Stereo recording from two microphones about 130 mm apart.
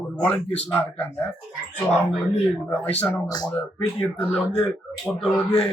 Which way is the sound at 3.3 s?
30° left (ahead or behind).